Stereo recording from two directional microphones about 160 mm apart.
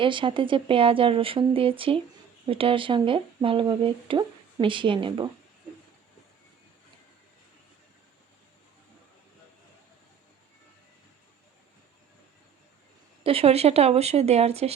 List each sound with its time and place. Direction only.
0.0 s speech: 30° right (ahead or behind)
13.2 s speech: 35° right (ahead or behind)